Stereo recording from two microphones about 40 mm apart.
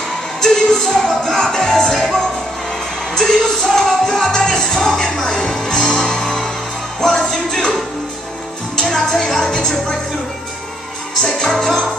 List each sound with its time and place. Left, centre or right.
0.4 s music: centre
3.2 s music: centre
5.2 s speech: left
5.7 s music: centre
7.3 s speech: left
8.7 s music: centre
9.4 s speech: centre
11.2 s music: centre